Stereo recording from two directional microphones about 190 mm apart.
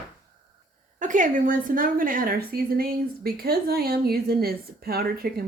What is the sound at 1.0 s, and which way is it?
A woman's voice, 40° right (ahead or behind).